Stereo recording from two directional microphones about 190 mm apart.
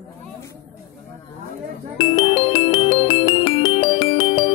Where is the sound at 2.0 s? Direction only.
25° left (ahead or behind).